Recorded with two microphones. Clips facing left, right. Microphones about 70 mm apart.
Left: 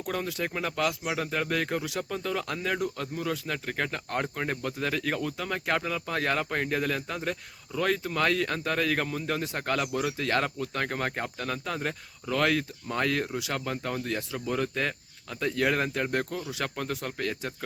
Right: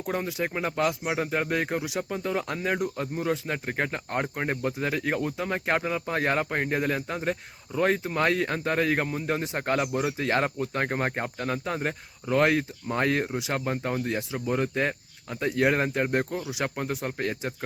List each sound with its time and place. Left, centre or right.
0.0 s speech: right